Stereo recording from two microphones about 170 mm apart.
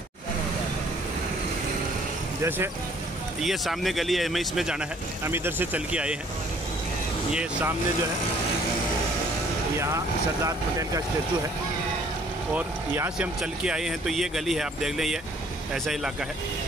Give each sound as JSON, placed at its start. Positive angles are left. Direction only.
{"t": 2.4, "sound": "speech", "side_deg": -15}
{"t": 3.3, "sound": "speech", "side_deg": 0}
{"t": 5.2, "sound": "speech", "side_deg": -15}
{"t": 10.4, "sound": "speech", "side_deg": -20}
{"t": 12.5, "sound": "speech", "side_deg": -10}